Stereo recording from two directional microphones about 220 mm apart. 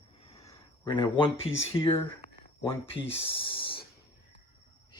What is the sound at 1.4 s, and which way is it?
Speech, 25° left (ahead or behind).